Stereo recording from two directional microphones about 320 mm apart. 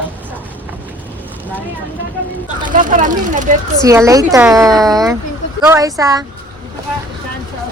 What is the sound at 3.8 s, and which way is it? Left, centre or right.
Speech, centre.